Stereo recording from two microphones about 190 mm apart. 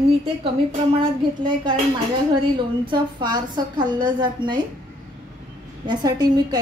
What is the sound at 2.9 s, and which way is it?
A woman's voice, 20° right (ahead or behind).